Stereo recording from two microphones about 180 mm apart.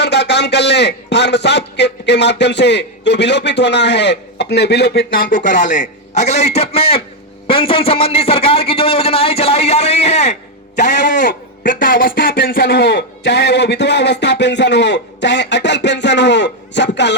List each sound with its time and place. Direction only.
0.0 s a man's voice: 70° left (ahead or behind); by 10.3 s 35° left (ahead or behind)
10.9 s a man's voice: 80° left
11.2 s a man's voice: 50° left (ahead or behind); by 17.2 s 75° left (ahead or behind)